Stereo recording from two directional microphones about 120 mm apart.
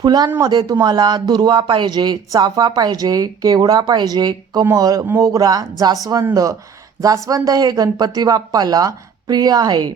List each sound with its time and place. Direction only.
0.0 s speech: 35° right (ahead or behind)